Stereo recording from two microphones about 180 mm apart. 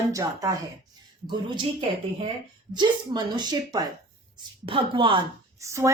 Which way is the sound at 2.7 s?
25° right (ahead or behind).